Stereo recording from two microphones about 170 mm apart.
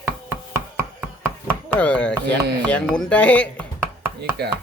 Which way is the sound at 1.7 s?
10° left (ahead or behind).